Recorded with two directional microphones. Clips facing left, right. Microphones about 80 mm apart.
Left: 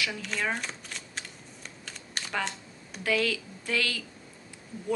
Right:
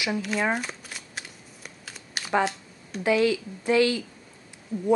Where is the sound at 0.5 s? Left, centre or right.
Centre.